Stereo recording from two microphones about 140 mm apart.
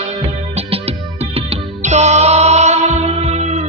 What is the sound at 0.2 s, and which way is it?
Music, 45° right (ahead or behind).